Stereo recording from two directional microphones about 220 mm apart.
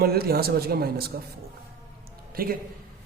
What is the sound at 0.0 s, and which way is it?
A man's voice, 45° right (ahead or behind).